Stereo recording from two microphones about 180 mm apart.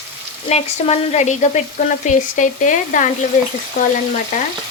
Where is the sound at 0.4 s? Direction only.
35° left (ahead or behind).